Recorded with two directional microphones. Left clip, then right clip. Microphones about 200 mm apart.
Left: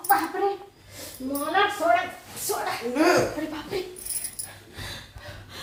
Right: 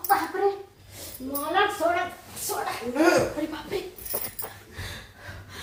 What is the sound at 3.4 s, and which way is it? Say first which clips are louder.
Speech: right 1 dB; 15° right (ahead or behind).